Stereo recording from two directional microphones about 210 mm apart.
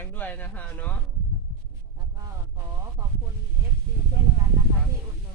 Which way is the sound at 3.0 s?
15° right (ahead or behind).